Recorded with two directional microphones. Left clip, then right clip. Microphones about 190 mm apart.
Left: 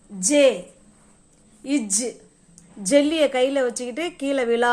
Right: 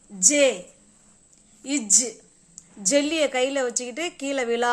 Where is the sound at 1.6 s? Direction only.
10° right (ahead or behind).